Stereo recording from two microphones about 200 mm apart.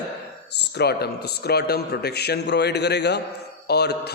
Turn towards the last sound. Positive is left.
turn(degrees=55)  # may be behind; listen again after turning